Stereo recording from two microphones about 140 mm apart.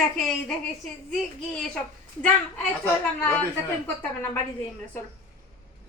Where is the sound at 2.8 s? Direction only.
10° left (ahead or behind).